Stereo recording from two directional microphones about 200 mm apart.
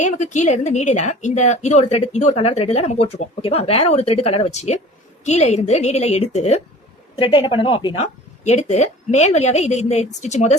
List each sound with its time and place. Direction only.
0.0 s a woman's voice: 40° left (ahead or behind)